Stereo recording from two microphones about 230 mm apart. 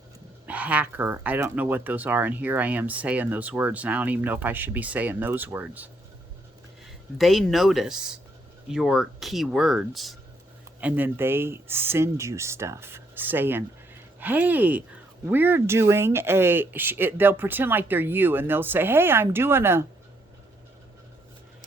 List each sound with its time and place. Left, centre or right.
0.4 s speech: centre